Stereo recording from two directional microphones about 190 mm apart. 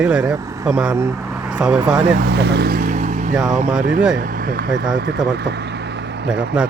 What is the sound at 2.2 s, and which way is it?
Speech, 60° right (ahead or behind).